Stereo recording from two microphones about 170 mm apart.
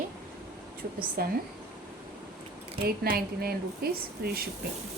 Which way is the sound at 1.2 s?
60° right (ahead or behind).